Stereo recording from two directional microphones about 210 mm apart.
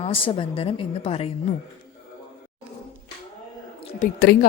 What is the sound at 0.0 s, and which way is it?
A woman's voice, 25° left (ahead or behind).